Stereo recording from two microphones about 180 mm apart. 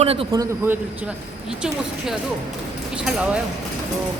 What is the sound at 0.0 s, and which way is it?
Speech, 35° right (ahead or behind).